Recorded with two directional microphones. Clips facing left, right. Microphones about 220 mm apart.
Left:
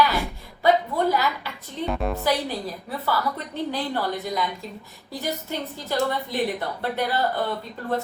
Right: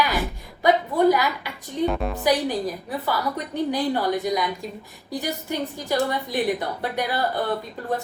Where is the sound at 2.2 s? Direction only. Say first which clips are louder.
Right 3 dB; 15° right (ahead or behind).